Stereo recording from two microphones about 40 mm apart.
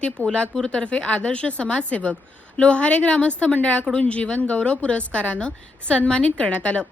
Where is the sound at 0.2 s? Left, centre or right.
Left.